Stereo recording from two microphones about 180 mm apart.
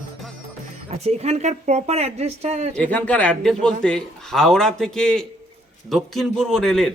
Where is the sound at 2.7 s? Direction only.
5° left (ahead or behind).